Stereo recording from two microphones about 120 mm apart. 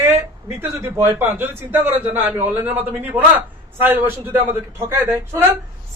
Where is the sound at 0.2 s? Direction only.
25° right (ahead or behind).